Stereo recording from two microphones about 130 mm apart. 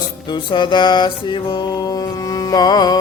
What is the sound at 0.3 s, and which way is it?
Music, 35° left (ahead or behind).